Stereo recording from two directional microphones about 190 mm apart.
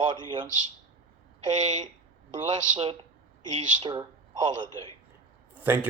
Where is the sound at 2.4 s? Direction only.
25° right (ahead or behind).